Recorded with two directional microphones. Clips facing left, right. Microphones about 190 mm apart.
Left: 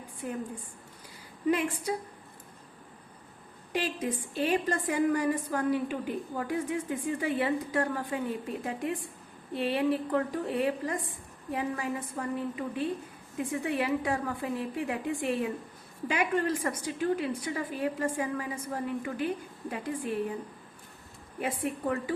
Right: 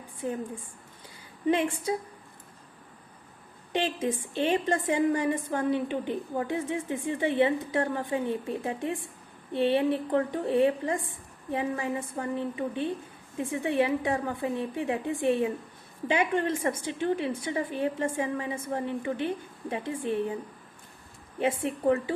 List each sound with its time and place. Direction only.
0.2 s a woman's voice: 25° right (ahead or behind)
1.5 s a woman's voice: 25° right (ahead or behind)
3.7 s a woman's voice: 25° right (ahead or behind)
21.3 s a woman's voice: 25° right (ahead or behind)